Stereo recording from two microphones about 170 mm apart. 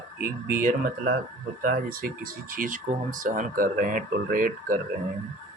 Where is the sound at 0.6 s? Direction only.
55° right (ahead or behind).